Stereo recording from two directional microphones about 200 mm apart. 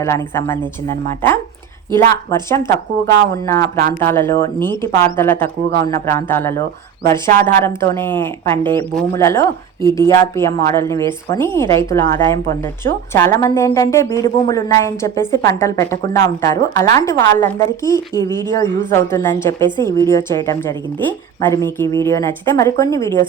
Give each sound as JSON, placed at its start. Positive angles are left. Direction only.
{"t": 0.0, "sound": "speech", "side_deg": 15}